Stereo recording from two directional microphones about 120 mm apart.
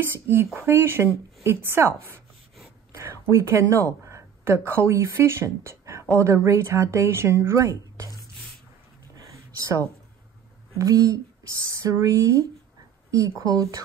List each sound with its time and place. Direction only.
0.0 s speech: 20° right (ahead or behind)
2.9 s a sound: 25° right (ahead or behind)
4.0 s speech: 20° right (ahead or behind)
9.3 s a sound: 25° right (ahead or behind)
10.8 s speech: 30° right (ahead or behind)
13.5 s speech: 30° right (ahead or behind)